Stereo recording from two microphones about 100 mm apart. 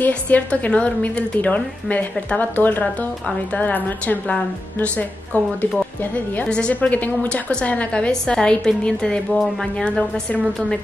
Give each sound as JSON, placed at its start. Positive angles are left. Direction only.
{"t": 0.0, "sound": "a woman's voice", "side_deg": 15}